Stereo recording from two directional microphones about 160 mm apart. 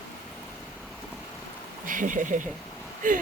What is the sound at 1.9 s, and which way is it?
Speech, 55° right (ahead or behind).